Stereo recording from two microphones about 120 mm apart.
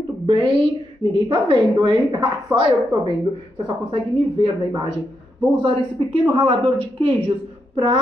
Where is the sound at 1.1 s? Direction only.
40° right (ahead or behind).